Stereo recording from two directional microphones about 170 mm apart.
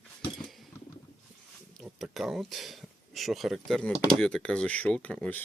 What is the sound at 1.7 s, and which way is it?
Speech, centre (ahead or behind).